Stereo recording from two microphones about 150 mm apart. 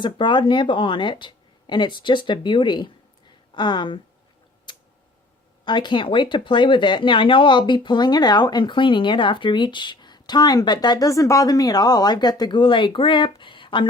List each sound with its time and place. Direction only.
0.0 s speech: 30° left (ahead or behind)
4.7 s tick-tock: 30° left (ahead or behind)
5.6 s speech: 30° left (ahead or behind)